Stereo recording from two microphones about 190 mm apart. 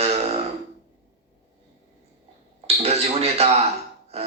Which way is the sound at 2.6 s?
35° right (ahead or behind).